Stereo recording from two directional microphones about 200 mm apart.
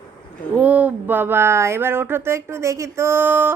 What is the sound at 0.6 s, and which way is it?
A woman's voice, 5° right (ahead or behind).